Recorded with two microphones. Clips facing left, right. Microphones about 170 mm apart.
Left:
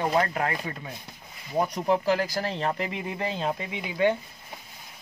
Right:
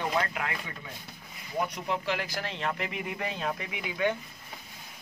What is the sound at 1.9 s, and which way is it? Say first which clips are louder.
Speech: left 8 dB; 40° left (ahead or behind).